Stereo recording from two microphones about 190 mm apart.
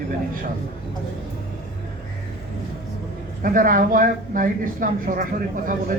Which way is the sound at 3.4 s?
45° right (ahead or behind).